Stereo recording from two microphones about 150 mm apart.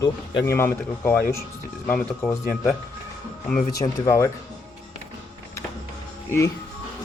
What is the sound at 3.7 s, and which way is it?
Speech, 25° left (ahead or behind).